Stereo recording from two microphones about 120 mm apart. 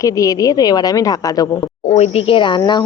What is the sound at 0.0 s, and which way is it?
Speech, 30° left (ahead or behind).